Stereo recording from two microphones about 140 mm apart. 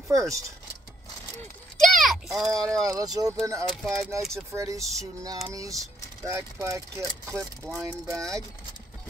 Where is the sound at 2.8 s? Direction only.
25° right (ahead or behind).